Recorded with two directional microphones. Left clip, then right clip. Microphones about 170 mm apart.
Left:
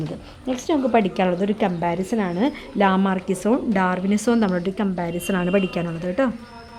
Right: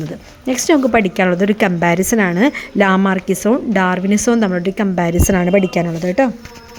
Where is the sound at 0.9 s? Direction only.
15° right (ahead or behind).